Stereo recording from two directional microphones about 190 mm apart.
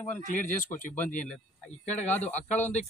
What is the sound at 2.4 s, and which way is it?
Speech, 10° left (ahead or behind).